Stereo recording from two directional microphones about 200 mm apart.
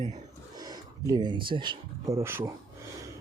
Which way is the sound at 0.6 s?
20° right (ahead or behind).